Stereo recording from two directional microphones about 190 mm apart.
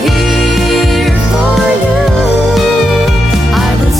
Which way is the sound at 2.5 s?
Centre (ahead or behind).